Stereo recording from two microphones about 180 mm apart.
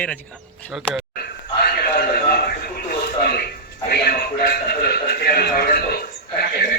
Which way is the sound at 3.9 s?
60° left (ahead or behind).